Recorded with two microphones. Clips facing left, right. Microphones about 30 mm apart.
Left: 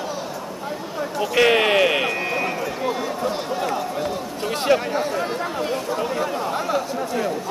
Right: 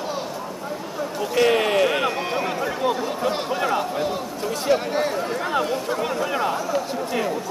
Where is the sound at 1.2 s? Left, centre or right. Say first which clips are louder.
Left 2 dB; left.